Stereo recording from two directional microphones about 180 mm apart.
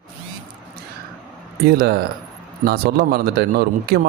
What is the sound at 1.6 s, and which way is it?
A man's voice, 60° right (ahead or behind).